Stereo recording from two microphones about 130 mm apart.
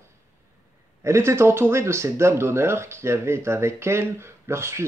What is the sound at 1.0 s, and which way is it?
Speech, 20° right (ahead or behind).